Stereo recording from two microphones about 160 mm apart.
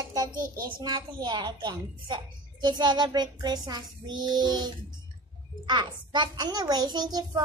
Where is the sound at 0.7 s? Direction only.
25° right (ahead or behind).